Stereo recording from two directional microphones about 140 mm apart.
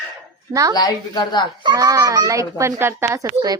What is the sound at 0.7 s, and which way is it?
Speech, 30° left (ahead or behind).